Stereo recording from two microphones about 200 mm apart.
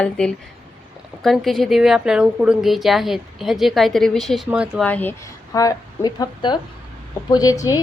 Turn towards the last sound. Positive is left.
turn(degrees=15)  # may be behind; listen again after turning